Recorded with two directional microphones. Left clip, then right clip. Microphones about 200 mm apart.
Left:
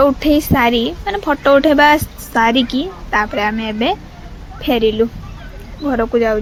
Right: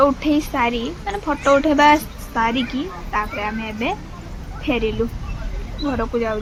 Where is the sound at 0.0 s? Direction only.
20° left (ahead or behind).